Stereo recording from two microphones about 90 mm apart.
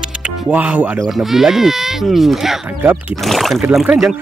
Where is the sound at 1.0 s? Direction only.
Centre (ahead or behind).